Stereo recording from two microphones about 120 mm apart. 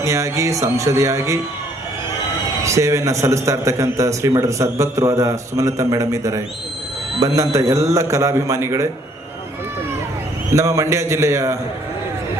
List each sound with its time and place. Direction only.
0.0 s a man's voice: 25° right (ahead or behind)
2.6 s a man's voice: 25° right (ahead or behind)
10.5 s a man's voice: 25° right (ahead or behind)